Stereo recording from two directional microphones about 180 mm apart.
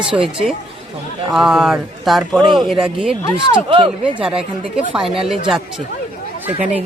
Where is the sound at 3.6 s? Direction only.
30° right (ahead or behind).